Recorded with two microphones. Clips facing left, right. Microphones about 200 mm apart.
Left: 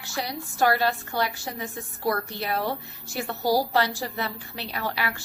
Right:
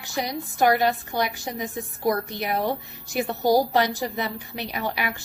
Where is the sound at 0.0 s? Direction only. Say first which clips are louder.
Right 3 dB; 15° right (ahead or behind).